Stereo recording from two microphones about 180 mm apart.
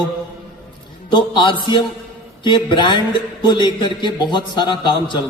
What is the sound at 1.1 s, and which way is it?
Speech, 25° left (ahead or behind).